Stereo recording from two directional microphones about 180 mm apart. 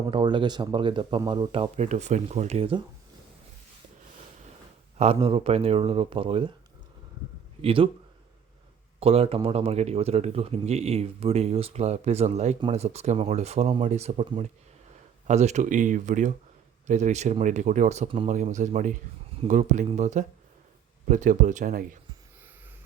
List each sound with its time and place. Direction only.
0.1 s speech: 25° right (ahead or behind)
4.9 s speech: 35° right (ahead or behind)
7.6 s speech: 30° right (ahead or behind)
9.0 s speech: 30° right (ahead or behind); by 21.9 s 50° right (ahead or behind)